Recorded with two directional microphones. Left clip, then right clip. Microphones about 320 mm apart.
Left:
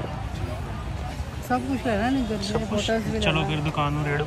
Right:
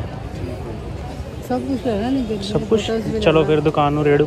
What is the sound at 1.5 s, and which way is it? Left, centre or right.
Speech, centre.